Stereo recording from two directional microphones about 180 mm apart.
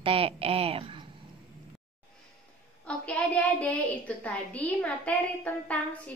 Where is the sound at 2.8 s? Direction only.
5° left (ahead or behind).